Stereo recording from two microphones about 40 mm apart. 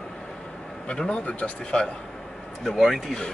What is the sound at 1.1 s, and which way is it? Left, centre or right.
Speech, left.